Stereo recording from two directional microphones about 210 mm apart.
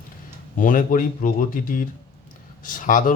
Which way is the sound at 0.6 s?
40° left (ahead or behind).